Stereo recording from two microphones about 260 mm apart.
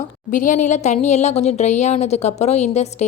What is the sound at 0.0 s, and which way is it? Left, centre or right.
A woman's voice, left.